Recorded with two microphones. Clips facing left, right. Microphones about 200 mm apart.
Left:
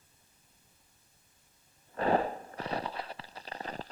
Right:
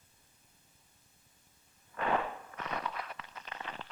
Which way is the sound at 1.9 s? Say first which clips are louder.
Left 5 dB; 35° left (ahead or behind).